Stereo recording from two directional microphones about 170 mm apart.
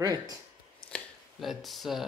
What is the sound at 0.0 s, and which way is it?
Speech, 20° right (ahead or behind).